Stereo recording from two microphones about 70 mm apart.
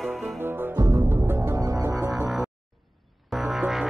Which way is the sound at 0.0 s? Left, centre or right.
Centre.